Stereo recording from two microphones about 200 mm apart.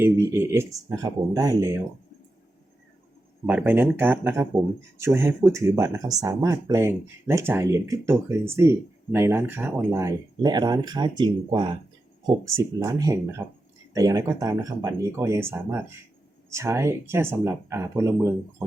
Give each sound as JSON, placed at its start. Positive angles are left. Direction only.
{"t": 0.0, "sound": "speech", "side_deg": -15}
{"t": 3.4, "sound": "speech", "side_deg": -5}